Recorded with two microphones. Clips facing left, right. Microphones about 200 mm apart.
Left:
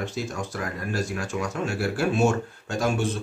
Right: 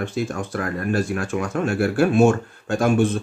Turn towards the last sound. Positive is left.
turn(degrees=-55)  # may be behind; listen again after turning